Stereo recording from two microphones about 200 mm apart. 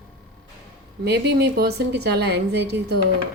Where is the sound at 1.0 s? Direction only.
55° right (ahead or behind).